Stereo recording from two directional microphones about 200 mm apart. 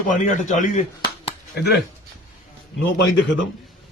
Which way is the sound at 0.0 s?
40° left (ahead or behind).